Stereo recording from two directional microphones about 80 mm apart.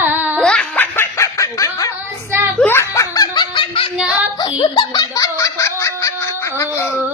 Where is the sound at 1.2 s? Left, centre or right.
Left.